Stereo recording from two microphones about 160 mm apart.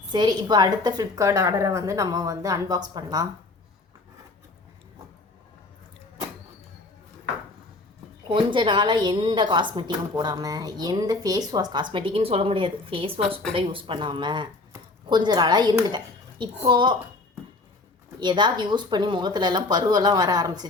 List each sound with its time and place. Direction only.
0.1 s a woman's voice: 25° right (ahead or behind)
8.3 s a woman's voice: 30° right (ahead or behind)
18.2 s a woman's voice: 30° right (ahead or behind)